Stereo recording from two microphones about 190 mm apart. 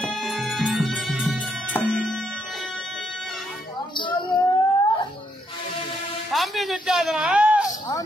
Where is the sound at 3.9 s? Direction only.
25° left (ahead or behind).